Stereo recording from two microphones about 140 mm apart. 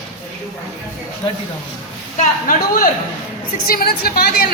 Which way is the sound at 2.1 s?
80° left.